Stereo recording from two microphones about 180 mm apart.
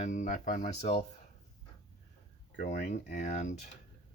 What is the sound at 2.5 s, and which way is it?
Speech, 40° left (ahead or behind).